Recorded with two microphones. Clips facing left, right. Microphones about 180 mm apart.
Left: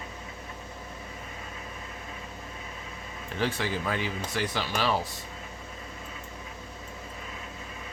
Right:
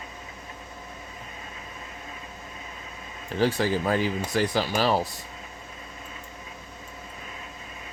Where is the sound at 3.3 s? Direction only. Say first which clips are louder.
Right 6 dB; 35° right (ahead or behind).